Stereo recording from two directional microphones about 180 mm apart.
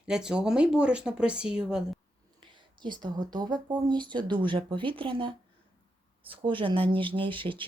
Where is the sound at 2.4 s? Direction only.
25° right (ahead or behind).